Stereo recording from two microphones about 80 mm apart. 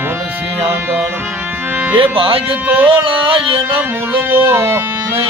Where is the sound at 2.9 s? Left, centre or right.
Right.